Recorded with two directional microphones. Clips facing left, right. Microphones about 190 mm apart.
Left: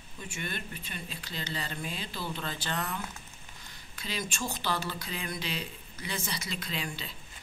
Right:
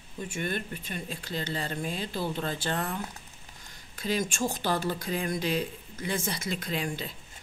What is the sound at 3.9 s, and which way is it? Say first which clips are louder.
Speech: right 7 dB; 45° right (ahead or behind).